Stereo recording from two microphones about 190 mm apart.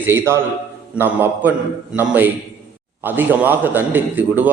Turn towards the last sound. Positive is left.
turn(degrees=-10)  # may be behind; listen again after turning